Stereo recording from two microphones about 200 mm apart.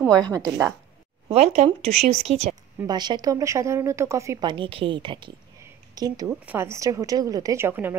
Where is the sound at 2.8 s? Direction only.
20° right (ahead or behind).